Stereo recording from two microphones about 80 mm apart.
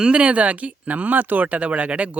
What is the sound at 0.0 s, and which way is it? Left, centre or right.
Speech, centre.